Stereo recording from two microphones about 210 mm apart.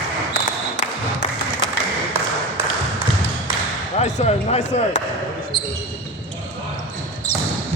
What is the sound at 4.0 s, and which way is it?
Speech, 30° left (ahead or behind).